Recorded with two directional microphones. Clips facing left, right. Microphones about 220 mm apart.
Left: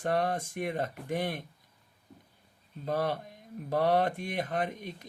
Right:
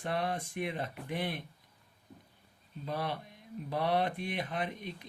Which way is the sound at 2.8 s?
45° left (ahead or behind).